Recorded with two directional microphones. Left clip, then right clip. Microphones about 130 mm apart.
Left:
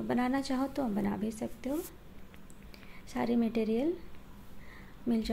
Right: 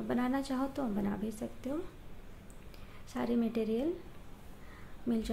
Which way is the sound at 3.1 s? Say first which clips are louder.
Left 2 dB; 20° left (ahead or behind).